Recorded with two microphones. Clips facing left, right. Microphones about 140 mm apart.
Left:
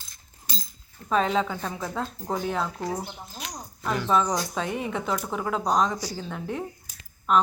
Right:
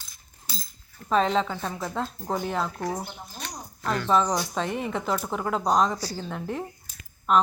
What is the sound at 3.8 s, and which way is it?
Speech, 15° left (ahead or behind).